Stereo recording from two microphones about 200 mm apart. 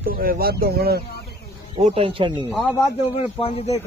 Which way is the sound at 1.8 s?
25° right (ahead or behind).